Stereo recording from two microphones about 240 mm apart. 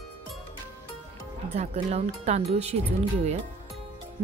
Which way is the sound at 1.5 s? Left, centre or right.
Right.